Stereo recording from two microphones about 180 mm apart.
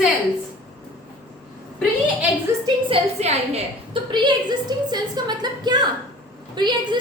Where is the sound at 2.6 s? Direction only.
35° right (ahead or behind).